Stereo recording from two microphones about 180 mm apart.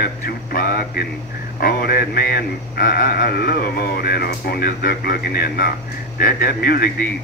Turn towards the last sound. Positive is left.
turn(degrees=60)  # may be behind; listen again after turning